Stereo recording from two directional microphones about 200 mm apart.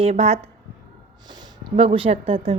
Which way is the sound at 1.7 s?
25° right (ahead or behind).